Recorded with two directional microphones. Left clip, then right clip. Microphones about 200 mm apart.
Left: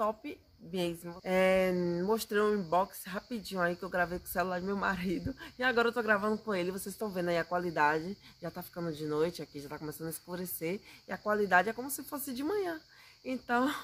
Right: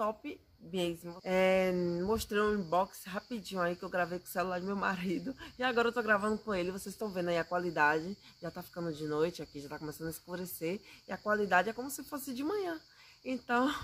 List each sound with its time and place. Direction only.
0.0 s speech: 5° left (ahead or behind)